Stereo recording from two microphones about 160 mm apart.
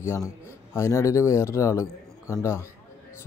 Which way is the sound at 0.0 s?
15° left (ahead or behind).